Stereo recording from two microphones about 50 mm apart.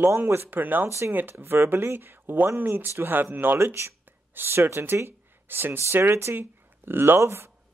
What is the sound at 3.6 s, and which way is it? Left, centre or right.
Speech, right.